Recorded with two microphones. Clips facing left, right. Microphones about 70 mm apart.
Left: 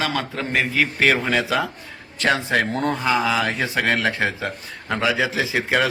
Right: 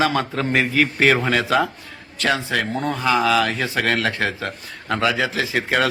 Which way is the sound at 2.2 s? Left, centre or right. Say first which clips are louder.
Left 1 dB; left.